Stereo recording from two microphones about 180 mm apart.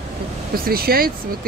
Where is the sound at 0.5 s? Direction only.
55° right (ahead or behind).